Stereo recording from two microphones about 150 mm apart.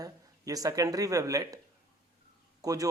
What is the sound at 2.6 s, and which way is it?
Speech, 25° right (ahead or behind).